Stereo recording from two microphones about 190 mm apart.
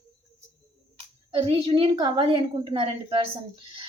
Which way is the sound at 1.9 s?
25° right (ahead or behind).